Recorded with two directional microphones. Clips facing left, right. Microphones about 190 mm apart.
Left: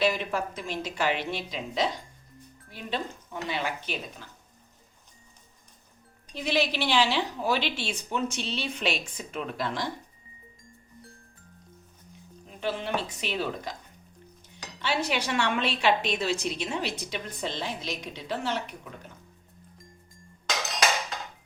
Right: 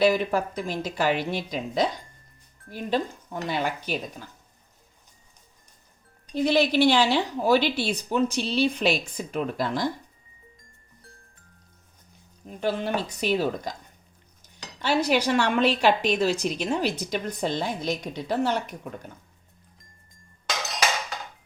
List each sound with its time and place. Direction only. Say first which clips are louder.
0.0 s a woman's voice: right 5 dB; 40° right (ahead or behind)
6.3 s a woman's voice: right 7 dB; 45° right (ahead or behind)
12.5 s a woman's voice: right 4 dB; 45° right (ahead or behind)
14.8 s a woman's voice: right 6 dB; 40° right (ahead or behind)